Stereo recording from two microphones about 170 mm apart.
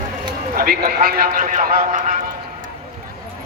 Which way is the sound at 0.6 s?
60° right (ahead or behind).